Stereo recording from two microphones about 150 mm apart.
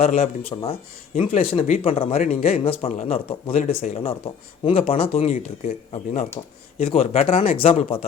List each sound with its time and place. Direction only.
0.0 s speech: 45° left (ahead or behind)
2.1 s speech: 55° left (ahead or behind)